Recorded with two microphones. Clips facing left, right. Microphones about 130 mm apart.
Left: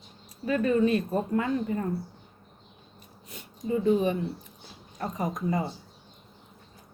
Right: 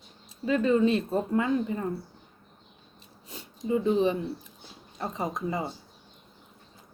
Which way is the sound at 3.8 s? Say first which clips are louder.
Left 1 dB; 25° right (ahead or behind).